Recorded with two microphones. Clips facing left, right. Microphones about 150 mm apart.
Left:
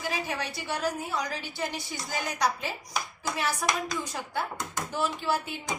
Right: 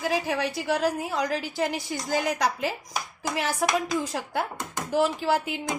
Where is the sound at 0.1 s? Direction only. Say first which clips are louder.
Right 6 dB; 90° right.